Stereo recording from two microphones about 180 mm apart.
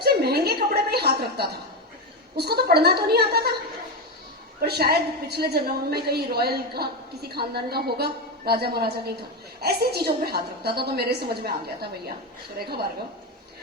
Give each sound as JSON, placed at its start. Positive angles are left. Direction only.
{"t": 0.0, "sound": "a sound", "side_deg": -60}
{"t": 2.3, "sound": "a woman's voice", "side_deg": -60}
{"t": 4.6, "sound": "a woman's voice", "side_deg": -60}